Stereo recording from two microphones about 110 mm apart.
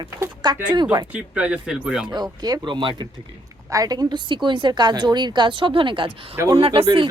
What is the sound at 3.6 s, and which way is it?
A woman's voice, 35° right (ahead or behind).